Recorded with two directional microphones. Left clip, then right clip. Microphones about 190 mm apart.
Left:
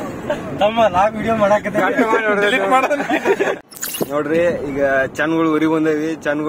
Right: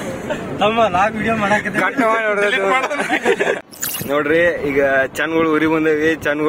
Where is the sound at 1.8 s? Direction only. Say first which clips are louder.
Even; 15° right (ahead or behind).